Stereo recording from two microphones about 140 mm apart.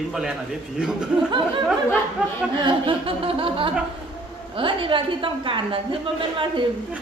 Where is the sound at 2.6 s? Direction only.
40° right (ahead or behind).